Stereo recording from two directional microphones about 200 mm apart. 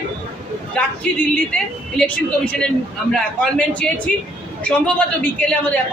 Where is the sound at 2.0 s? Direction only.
5° left (ahead or behind).